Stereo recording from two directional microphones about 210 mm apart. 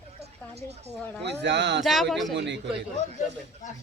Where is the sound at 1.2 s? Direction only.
55° right (ahead or behind).